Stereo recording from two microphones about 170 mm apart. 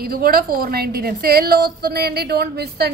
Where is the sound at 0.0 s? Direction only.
60° right (ahead or behind).